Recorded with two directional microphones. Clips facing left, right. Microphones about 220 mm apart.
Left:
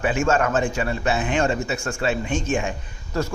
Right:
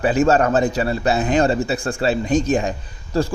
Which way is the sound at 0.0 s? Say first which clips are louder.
Right 5 dB; 35° right (ahead or behind).